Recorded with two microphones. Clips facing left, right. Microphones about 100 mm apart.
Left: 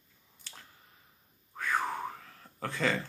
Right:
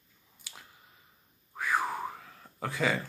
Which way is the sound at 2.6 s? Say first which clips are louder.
Right 1 dB; 5° right (ahead or behind).